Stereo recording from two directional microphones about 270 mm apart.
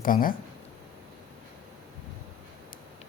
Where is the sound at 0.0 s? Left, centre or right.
Left.